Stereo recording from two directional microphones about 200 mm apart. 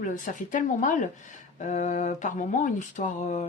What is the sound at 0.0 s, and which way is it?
Speech, 40° left (ahead or behind).